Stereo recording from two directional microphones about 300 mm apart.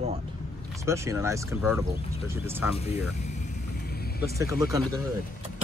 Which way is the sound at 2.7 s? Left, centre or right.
Left.